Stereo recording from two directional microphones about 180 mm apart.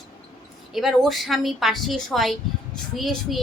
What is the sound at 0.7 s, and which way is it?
A child's voice, centre (ahead or behind).